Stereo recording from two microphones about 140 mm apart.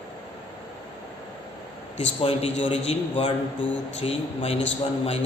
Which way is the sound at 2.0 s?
40° left (ahead or behind).